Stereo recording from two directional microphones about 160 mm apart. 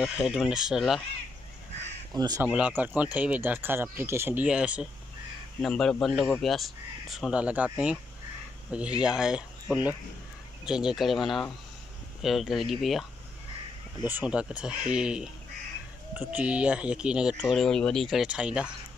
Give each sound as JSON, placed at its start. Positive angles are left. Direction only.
{"t": 0.0, "sound": "speech", "side_deg": -5}
{"t": 2.1, "sound": "speech", "side_deg": -25}
{"t": 2.4, "sound": "speech", "side_deg": -10}
{"t": 5.6, "sound": "speech", "side_deg": 5}
{"t": 14.0, "sound": "speech", "side_deg": -10}